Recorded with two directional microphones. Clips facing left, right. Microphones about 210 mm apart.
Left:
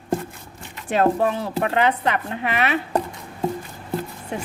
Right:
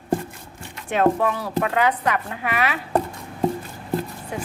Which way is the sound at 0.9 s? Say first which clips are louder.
Even; 30° left (ahead or behind).